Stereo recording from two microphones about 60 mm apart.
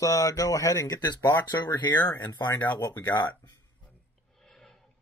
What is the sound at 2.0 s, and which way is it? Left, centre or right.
Speech, left.